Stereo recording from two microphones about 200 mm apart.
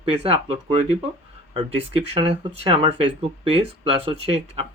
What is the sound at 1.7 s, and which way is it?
Speech, 30° right (ahead or behind).